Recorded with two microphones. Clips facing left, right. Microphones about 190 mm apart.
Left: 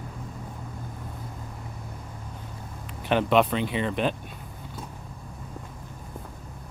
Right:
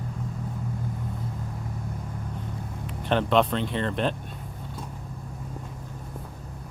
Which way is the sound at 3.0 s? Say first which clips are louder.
Left 1 dB; 5° left (ahead or behind).